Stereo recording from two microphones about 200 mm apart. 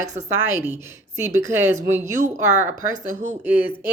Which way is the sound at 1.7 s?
35° right (ahead or behind).